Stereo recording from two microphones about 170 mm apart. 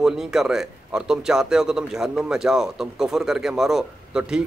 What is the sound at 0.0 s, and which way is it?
Speech, 5° right (ahead or behind).